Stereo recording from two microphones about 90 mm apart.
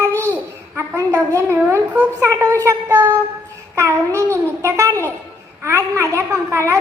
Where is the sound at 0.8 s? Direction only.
30° right (ahead or behind).